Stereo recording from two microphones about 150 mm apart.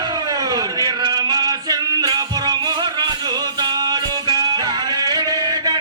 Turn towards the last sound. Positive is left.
turn(degrees=-25)  # may be behind; listen again after turning